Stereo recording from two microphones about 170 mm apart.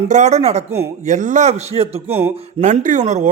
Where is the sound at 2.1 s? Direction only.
10° right (ahead or behind).